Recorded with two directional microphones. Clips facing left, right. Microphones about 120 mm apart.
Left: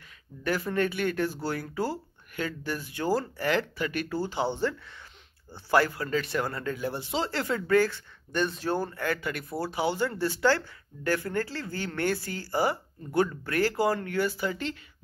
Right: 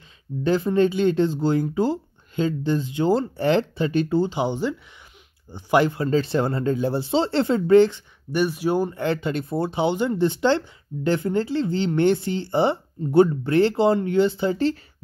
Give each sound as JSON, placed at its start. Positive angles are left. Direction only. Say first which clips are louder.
{"t": 0.4, "sound": "speech", "louder": "right 8 dB", "side_deg": -25}
{"t": 8.3, "sound": "speech", "louder": "right 6 dB", "side_deg": -10}